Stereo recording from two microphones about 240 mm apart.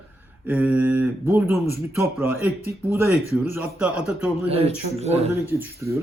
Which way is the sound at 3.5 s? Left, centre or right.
Centre.